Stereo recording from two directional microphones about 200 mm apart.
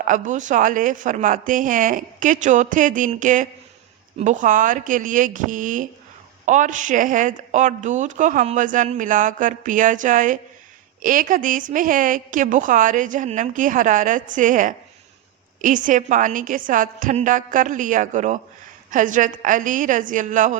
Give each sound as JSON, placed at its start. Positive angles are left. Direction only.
{"t": 0.0, "sound": "speech", "side_deg": -40}